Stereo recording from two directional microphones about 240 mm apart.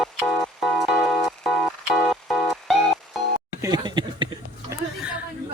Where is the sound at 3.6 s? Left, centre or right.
Centre.